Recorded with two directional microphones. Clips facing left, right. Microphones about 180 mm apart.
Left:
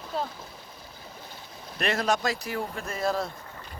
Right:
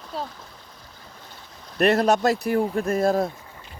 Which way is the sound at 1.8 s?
60° right (ahead or behind).